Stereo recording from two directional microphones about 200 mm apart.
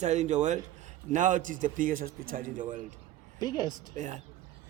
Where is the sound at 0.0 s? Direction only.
35° right (ahead or behind).